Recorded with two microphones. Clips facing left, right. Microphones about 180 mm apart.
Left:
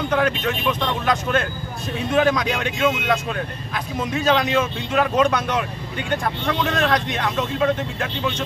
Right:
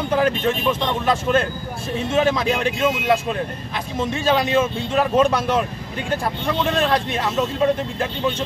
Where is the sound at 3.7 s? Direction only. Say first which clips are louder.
Even; 25° right (ahead or behind).